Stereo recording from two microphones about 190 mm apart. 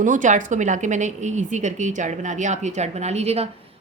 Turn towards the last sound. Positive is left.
turn(degrees=-35)  # may be behind; listen again after turning